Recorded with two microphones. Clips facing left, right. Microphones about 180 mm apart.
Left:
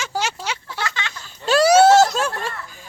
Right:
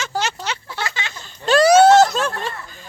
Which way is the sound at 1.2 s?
5° left (ahead or behind).